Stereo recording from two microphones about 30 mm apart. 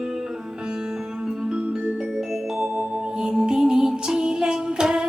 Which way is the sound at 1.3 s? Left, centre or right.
Right.